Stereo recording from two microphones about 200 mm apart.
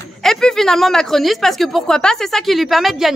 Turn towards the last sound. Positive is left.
turn(degrees=0)  # may be behind; listen again after turning